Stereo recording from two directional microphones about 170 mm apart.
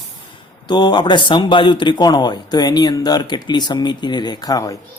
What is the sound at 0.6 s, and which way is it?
Speech, 25° left (ahead or behind).